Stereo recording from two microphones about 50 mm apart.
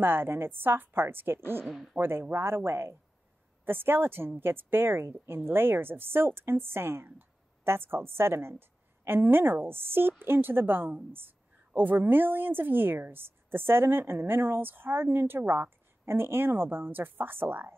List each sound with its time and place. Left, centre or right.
0.0 s a woman's voice: right